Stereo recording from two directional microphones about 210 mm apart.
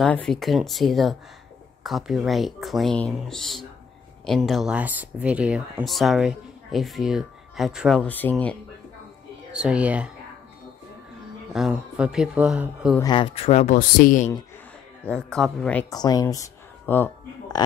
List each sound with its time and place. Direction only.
0.0 s speech: centre (ahead or behind)
9.5 s speech: 5° right (ahead or behind)
11.5 s speech: 5° right (ahead or behind)
13.0 s speech: 25° left (ahead or behind); by 14.3 s 40° left (ahead or behind)
15.0 s speech: 5° left (ahead or behind)
15.9 s speech: 20° left (ahead or behind)